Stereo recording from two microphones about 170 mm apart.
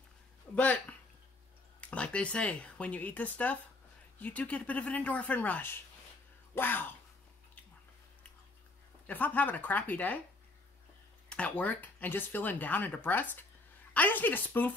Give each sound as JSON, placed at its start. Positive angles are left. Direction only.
{"t": 0.6, "sound": "speech", "side_deg": 10}
{"t": 9.0, "sound": "speech", "side_deg": 10}
{"t": 11.2, "sound": "speech", "side_deg": 5}